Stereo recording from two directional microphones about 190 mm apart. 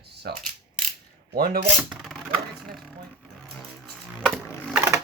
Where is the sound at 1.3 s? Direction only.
50° right (ahead or behind).